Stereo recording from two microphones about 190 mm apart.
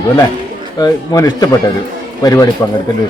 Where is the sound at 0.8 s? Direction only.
20° left (ahead or behind).